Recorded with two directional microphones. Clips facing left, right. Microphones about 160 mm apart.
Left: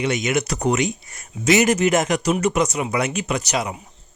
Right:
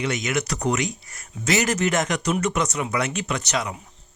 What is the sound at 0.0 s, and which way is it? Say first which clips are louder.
Speech: left 4 dB; 20° left (ahead or behind).